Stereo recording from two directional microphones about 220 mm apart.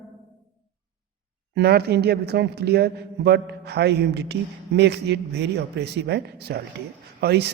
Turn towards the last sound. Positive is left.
turn(degrees=-45)  # may be behind; listen again after turning